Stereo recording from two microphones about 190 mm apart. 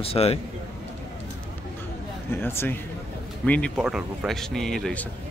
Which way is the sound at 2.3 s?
10° left (ahead or behind).